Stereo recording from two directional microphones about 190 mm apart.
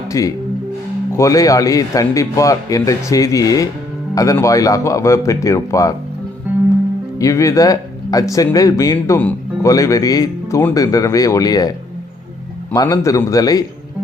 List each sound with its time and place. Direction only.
0.1 s speech: 15° left (ahead or behind)
7.2 s speech: 15° left (ahead or behind)
12.7 s a man's voice: 20° left (ahead or behind)